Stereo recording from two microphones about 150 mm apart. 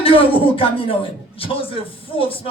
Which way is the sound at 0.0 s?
40° left (ahead or behind).